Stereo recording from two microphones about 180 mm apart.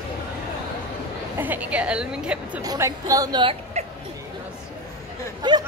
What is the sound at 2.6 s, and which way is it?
Speech, 20° right (ahead or behind).